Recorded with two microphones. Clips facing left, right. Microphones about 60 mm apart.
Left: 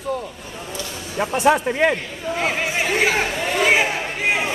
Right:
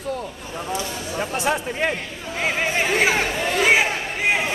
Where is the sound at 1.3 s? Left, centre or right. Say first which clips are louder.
Left 8 dB; left.